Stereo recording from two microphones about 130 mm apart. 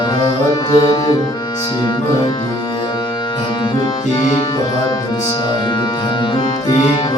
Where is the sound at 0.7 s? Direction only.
35° left (ahead or behind).